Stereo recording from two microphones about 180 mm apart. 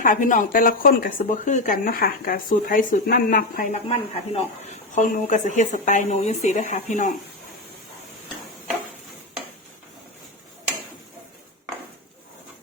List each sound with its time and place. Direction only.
0.0 s speech: 45° left (ahead or behind)
3.8 s speech: 35° left (ahead or behind)